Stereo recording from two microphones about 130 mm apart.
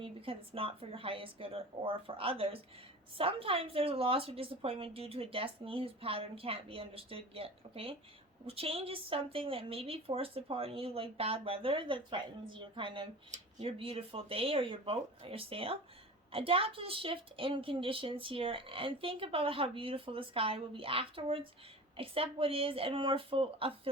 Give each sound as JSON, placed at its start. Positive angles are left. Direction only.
{"t": 0.0, "sound": "a woman's voice", "side_deg": -45}